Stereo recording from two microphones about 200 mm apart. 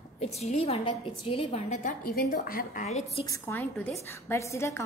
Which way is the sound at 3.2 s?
15° left (ahead or behind).